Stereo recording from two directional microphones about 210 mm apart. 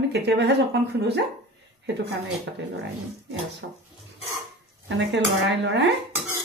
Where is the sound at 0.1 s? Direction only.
50° right (ahead or behind).